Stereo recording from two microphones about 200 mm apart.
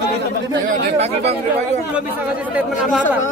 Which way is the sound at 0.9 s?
30° right (ahead or behind).